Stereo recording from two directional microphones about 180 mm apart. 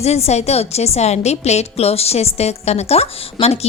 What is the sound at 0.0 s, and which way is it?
A woman's voice, 35° left (ahead or behind).